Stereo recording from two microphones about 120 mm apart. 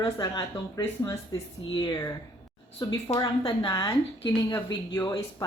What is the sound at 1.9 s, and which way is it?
Speech, 25° left (ahead or behind).